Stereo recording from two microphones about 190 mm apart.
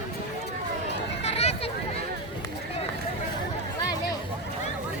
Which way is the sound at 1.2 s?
35° left (ahead or behind).